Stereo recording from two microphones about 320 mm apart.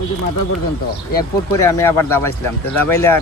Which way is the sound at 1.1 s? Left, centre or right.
Centre.